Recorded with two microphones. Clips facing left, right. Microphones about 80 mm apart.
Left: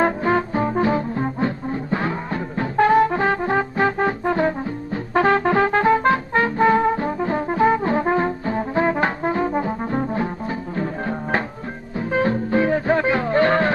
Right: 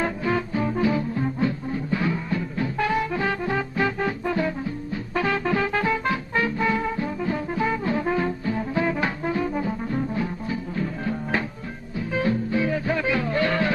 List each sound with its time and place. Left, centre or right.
0.0 s music: left